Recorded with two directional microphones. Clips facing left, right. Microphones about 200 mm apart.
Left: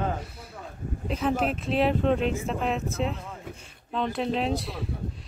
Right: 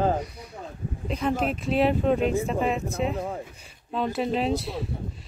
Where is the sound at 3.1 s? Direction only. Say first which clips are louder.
Right 9 dB; 55° right (ahead or behind).